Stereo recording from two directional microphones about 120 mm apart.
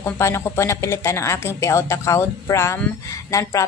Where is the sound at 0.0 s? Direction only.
25° left (ahead or behind).